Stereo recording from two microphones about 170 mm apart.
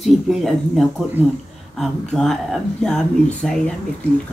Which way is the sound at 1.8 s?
5° left (ahead or behind).